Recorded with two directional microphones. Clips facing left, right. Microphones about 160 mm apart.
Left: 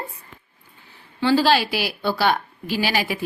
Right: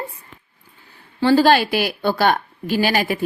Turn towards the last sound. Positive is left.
turn(degrees=-50)  # may be behind; listen again after turning